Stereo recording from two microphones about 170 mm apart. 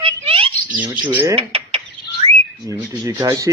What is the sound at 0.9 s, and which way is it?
Speech, 10° right (ahead or behind).